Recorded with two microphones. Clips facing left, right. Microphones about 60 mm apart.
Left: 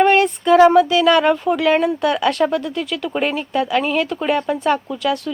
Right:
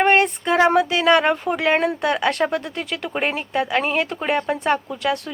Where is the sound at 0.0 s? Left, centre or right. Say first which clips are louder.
Left 3 dB; right.